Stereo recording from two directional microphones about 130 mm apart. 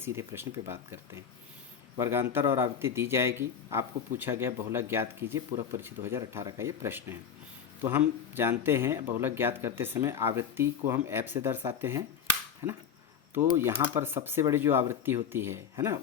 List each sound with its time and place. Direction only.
0.0 s a man's voice: 20° right (ahead or behind)